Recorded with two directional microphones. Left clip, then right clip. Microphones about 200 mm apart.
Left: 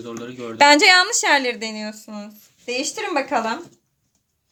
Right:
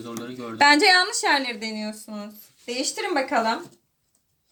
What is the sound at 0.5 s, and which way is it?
A woman's voice, 50° left (ahead or behind).